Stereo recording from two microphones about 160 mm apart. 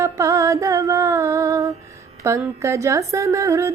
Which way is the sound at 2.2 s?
20° right (ahead or behind).